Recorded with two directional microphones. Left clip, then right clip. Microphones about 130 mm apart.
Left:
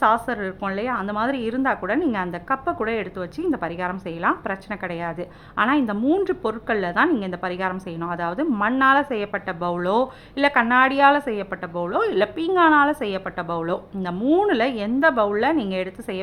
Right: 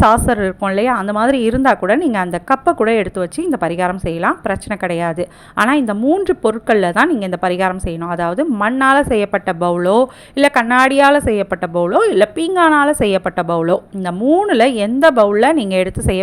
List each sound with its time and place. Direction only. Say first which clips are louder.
0.0 s a woman's voice: right 8 dB; 50° right (ahead or behind)